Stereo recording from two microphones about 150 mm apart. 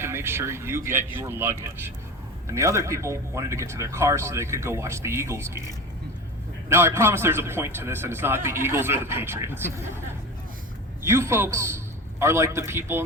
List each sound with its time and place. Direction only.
0.0 s a man's voice: 15° right (ahead or behind)
11.0 s a man's voice: 15° right (ahead or behind)